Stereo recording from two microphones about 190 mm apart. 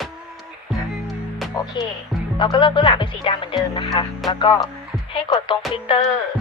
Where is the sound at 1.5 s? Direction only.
20° left (ahead or behind).